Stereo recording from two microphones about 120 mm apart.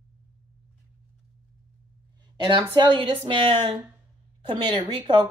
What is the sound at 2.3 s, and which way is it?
A woman's voice, 45° right (ahead or behind).